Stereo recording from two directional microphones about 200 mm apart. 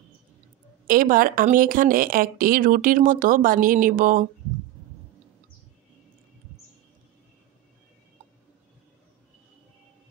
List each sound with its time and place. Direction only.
0.8 s speech: 45° right (ahead or behind)